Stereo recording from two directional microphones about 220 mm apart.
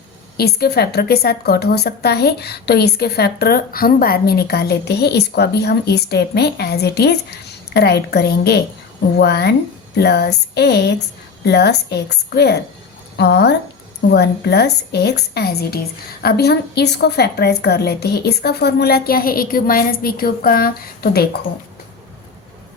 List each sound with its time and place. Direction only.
0.3 s a woman's voice: 45° left (ahead or behind)